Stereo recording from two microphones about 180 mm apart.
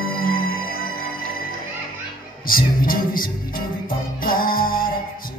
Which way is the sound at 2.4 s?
50° left (ahead or behind).